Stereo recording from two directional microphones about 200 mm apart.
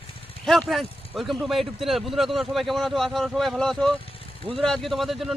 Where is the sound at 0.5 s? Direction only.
Centre (ahead or behind).